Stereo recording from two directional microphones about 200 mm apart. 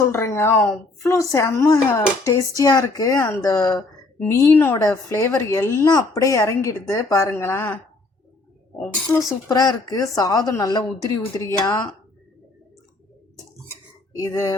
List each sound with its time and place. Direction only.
0.0 s a woman's voice: 15° left (ahead or behind)
8.8 s a woman's voice: 15° left (ahead or behind)
14.2 s speech: 20° left (ahead or behind)